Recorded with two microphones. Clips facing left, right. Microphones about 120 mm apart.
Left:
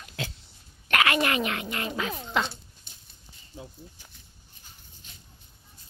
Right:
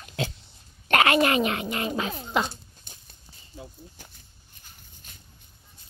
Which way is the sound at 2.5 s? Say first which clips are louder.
Right 2 dB; 45° right (ahead or behind).